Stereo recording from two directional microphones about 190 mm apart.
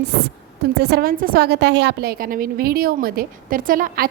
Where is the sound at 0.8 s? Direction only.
60° right (ahead or behind).